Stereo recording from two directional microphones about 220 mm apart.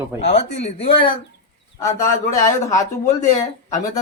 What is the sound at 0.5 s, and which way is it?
Speech, 30° left (ahead or behind).